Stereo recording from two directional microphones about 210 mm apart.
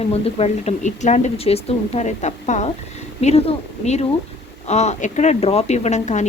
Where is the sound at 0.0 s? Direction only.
30° left (ahead or behind).